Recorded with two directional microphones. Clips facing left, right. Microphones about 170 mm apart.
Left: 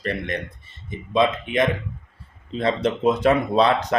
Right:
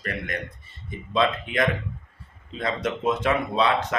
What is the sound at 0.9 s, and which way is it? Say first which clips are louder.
Speech: left 3 dB; 20° left (ahead or behind).